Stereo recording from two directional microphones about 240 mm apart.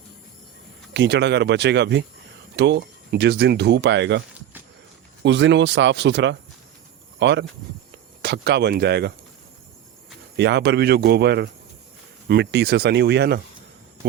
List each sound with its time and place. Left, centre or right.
0.9 s speech: right
5.2 s speech: right
10.3 s speech: right